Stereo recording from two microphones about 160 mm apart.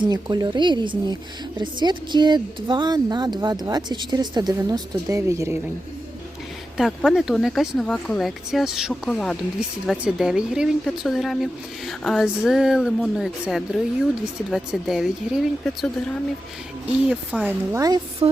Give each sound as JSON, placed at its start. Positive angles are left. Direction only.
{"t": 0.0, "sound": "a woman's voice", "side_deg": -25}
{"t": 6.7, "sound": "speech", "side_deg": 0}
{"t": 17.1, "sound": "speech", "side_deg": -10}
{"t": 17.7, "sound": "a woman's voice", "side_deg": -25}
{"t": 18.2, "sound": "a sound", "side_deg": -35}